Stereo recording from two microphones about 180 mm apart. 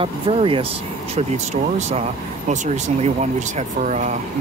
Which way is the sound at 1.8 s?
40° right (ahead or behind).